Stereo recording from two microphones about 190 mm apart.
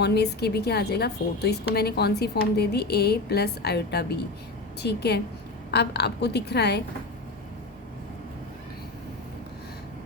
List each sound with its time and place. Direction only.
0.0 s a woman's voice: 60° left (ahead or behind)